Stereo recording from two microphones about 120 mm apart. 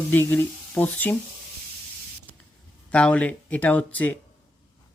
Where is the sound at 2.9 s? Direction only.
10° left (ahead or behind).